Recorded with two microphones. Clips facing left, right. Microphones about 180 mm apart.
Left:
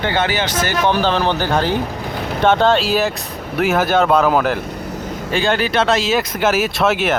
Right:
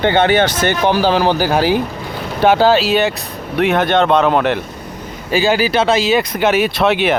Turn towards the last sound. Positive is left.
turn(degrees=0)  # may be behind; listen again after turning